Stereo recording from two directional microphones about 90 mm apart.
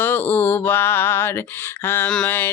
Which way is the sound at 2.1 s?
10° left (ahead or behind).